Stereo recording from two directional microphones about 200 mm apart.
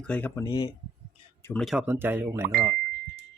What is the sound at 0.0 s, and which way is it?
Speech, 10° left (ahead or behind).